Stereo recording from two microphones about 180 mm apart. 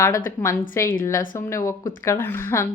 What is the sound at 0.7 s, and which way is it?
A woman's voice, 15° left (ahead or behind).